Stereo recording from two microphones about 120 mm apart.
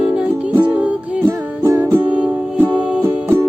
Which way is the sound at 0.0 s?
10° right (ahead or behind).